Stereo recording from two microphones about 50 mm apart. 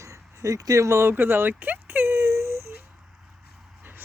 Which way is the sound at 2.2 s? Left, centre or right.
Right.